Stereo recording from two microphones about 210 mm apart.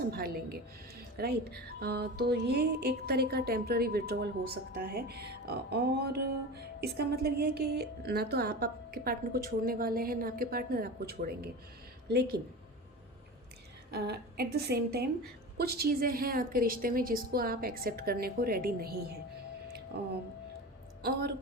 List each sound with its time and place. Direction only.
0.1 s speech: 45° right (ahead or behind)
13.9 s speech: 50° right (ahead or behind)
19.9 s speech: 50° right (ahead or behind)